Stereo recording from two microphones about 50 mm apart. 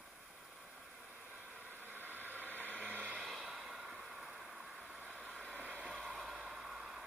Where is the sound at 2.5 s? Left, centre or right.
Left.